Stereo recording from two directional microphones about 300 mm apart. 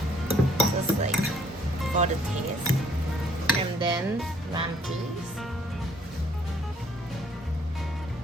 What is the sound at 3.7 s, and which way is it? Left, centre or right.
Music, centre.